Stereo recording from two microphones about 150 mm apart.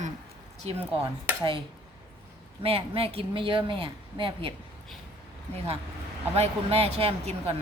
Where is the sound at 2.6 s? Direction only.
40° right (ahead or behind).